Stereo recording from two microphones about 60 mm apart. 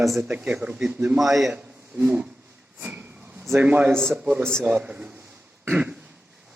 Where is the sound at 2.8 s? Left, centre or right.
Right.